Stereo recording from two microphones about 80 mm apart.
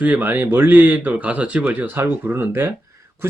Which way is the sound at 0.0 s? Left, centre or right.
Right.